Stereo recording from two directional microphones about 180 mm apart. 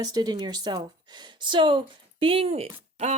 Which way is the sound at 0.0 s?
20° right (ahead or behind).